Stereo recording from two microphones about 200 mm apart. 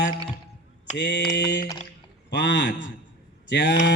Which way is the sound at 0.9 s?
60° left (ahead or behind).